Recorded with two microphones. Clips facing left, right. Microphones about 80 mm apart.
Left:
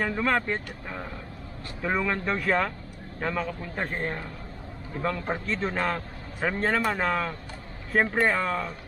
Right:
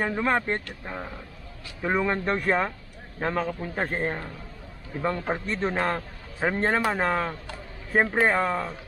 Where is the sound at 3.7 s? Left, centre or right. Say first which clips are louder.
Right 2 dB; right.